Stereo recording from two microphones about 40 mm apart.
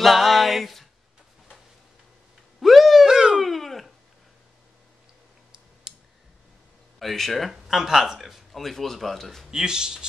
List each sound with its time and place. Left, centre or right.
0.0 s a sound: centre
2.6 s a sound: centre
3.1 s dog: centre
3.4 s dog: centre
5.9 s clicking: centre
7.0 s speech: centre
7.5 s speech: centre
8.5 s speech: centre
9.5 s speech: centre